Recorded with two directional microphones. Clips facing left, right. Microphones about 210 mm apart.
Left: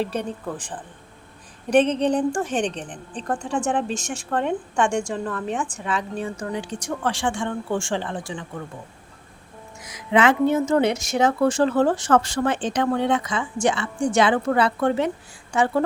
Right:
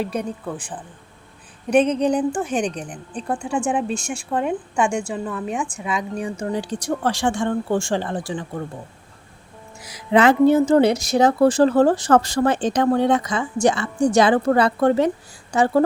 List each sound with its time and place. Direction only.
0.1 s a woman's voice: 10° right (ahead or behind)
6.3 s speech: 30° right (ahead or behind)
9.8 s speech: 35° right (ahead or behind)